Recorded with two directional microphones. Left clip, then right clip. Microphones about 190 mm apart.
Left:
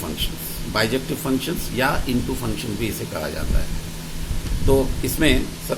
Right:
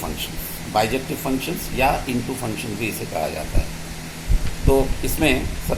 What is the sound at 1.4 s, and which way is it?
Speech, 50° left (ahead or behind).